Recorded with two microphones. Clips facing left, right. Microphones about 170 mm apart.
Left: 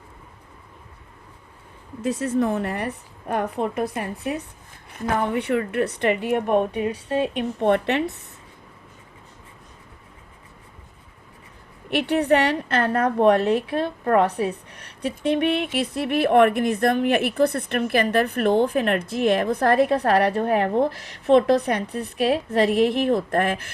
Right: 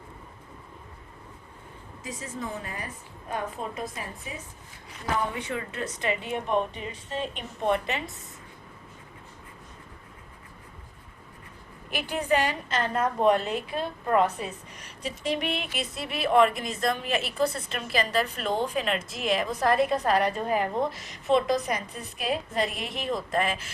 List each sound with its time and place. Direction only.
2.0 s a woman's voice: 70° left (ahead or behind)
4.9 s a woman's voice: 55° left (ahead or behind)
11.9 s a woman's voice: 65° left (ahead or behind)